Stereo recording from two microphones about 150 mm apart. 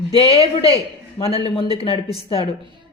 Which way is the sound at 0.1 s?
40° left (ahead or behind).